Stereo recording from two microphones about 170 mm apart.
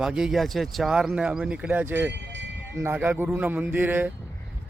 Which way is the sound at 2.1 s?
90° right.